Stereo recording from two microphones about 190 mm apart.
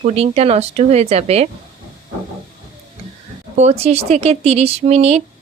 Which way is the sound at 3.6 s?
35° right (ahead or behind).